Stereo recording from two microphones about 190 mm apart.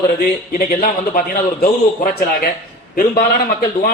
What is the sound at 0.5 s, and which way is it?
Speech, 45° left (ahead or behind).